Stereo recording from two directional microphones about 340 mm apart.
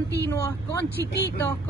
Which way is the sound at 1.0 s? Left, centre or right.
Left.